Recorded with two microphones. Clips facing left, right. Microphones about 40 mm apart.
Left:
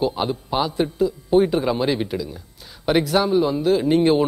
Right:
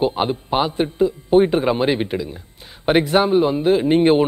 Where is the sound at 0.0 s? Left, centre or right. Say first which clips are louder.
Right 3 dB; right.